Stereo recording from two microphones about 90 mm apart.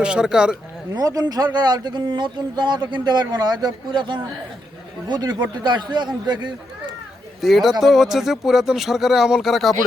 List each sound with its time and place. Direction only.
0.0 s speech: 10° right (ahead or behind)
0.9 s speech: 45° right (ahead or behind)
7.4 s speech: centre (ahead or behind)